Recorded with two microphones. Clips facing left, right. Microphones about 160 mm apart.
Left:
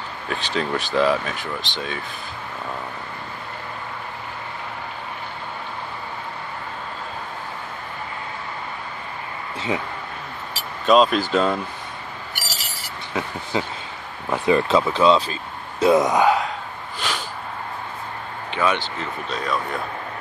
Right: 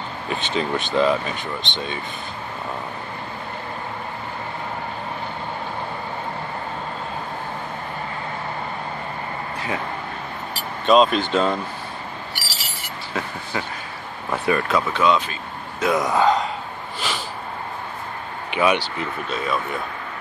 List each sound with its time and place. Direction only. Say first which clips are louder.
0.3 s speech: right 1 dB; centre (ahead or behind)
10.5 s speech: even; centre (ahead or behind)
13.1 s speech: left 3 dB; 20° left (ahead or behind)
17.0 s a sound: even; 5° right (ahead or behind)
18.5 s speech: right 3 dB; 15° right (ahead or behind)